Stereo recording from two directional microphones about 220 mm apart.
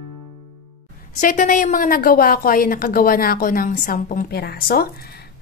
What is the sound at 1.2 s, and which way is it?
A woman's voice, 35° left (ahead or behind).